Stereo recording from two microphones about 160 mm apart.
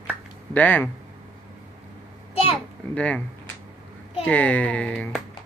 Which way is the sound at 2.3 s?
35° left (ahead or behind).